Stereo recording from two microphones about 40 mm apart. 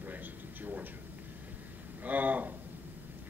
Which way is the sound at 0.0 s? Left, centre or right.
Right.